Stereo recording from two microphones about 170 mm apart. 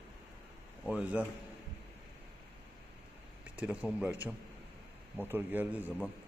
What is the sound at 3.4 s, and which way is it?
A man's voice, 10° right (ahead or behind).